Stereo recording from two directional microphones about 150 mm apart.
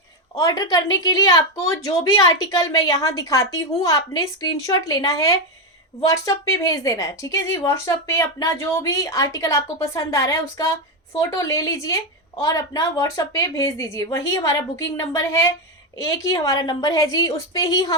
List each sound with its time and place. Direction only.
0.3 s a woman's voice: 25° left (ahead or behind)